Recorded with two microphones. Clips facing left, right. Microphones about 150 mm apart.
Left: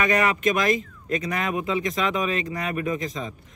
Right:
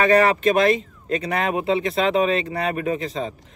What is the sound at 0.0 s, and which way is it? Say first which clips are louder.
Speech: right 5 dB; 35° right (ahead or behind).